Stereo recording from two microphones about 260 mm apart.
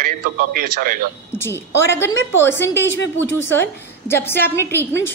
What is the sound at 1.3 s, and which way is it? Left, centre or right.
A woman's voice, centre.